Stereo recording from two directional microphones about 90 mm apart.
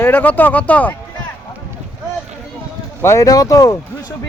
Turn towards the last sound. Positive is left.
turn(degrees=40)  # may be behind; listen again after turning